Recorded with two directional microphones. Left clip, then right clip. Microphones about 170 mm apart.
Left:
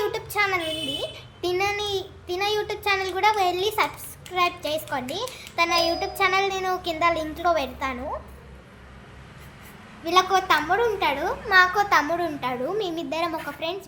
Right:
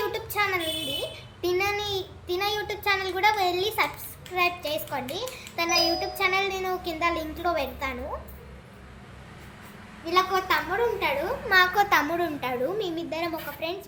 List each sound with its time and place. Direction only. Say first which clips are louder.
0.1 s child singing: left 3 dB; 30° left (ahead or behind)
1.0 s a sound: left 1 dB; 25° left (ahead or behind)
4.4 s a child's voice: left 2 dB; 30° left (ahead or behind)
5.9 s a sound: left 3 dB; 30° left (ahead or behind)
10.1 s a woman's voice: left 4 dB; 50° left (ahead or behind)
11.4 s a child's voice: left 2 dB; 15° left (ahead or behind)
12.8 s a child's voice: left 3 dB; 35° left (ahead or behind)